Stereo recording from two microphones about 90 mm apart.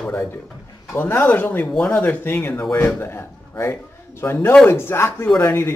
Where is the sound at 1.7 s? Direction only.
5° left (ahead or behind).